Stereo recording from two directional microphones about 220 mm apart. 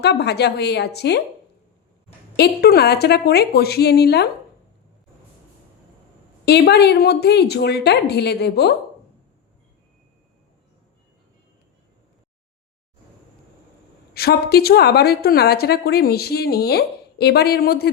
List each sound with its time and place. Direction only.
0.0 s a woman's voice: 50° left (ahead or behind)
2.3 s a woman's voice: 45° left (ahead or behind)
6.4 s a woman's voice: 45° left (ahead or behind)
14.1 s a woman's voice: 45° left (ahead or behind)